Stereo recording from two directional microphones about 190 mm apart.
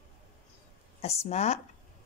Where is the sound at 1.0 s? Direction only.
35° left (ahead or behind).